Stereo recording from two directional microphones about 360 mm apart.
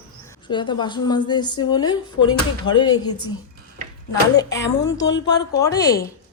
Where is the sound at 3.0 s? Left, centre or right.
Left.